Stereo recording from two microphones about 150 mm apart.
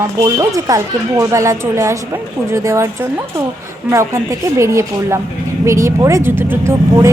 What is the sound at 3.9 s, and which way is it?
Speech, 20° right (ahead or behind).